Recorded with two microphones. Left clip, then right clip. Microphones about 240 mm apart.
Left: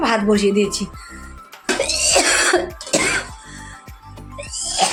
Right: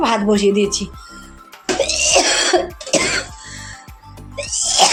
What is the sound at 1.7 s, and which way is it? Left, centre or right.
Cough, centre.